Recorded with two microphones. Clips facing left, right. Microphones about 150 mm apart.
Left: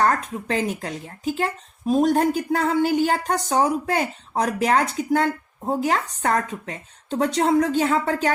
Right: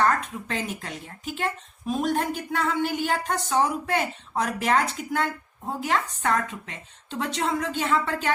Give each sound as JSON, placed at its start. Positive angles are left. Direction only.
{"t": 0.0, "sound": "speech", "side_deg": 40}